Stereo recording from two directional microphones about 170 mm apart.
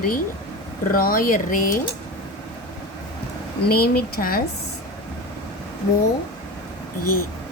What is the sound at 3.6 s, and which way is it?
Speech, 65° left (ahead or behind).